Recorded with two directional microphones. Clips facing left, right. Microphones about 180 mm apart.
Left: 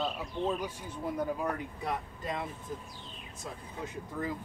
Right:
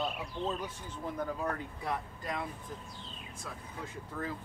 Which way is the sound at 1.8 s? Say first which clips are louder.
Left 1 dB; 20° left (ahead or behind).